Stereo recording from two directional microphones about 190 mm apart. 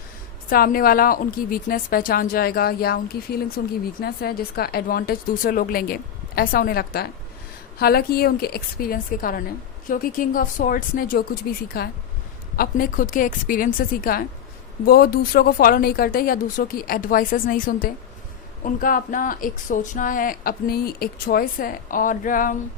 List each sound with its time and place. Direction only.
0.5 s speech: 50° left (ahead or behind)